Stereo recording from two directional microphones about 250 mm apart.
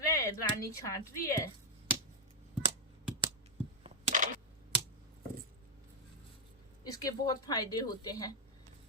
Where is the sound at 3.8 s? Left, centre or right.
Right.